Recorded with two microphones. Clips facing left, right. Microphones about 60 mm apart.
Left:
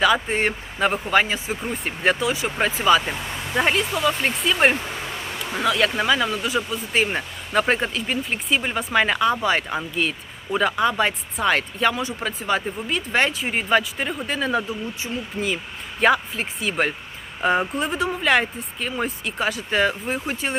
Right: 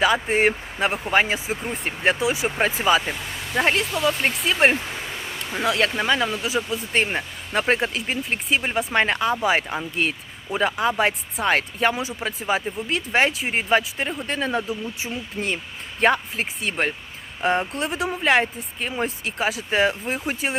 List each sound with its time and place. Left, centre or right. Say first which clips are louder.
0.0 s speech: right 1 dB; centre
9.4 s speech: right 1 dB; centre
9.6 s speech: even; centre
15.4 s speech: left 1 dB; centre
16.0 s speech: left 1 dB; centre